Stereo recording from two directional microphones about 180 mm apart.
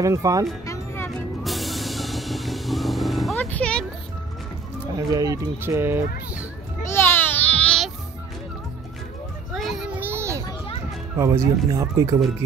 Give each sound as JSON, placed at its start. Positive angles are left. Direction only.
{"t": 0.0, "sound": "speech", "side_deg": -20}
{"t": 0.7, "sound": "music", "side_deg": 15}
{"t": 1.4, "sound": "vehicle", "side_deg": 0}
{"t": 4.9, "sound": "speech", "side_deg": -20}
{"t": 6.9, "sound": "babbling", "side_deg": 10}
{"t": 9.5, "sound": "children playing", "side_deg": 0}
{"t": 11.1, "sound": "speech", "side_deg": -15}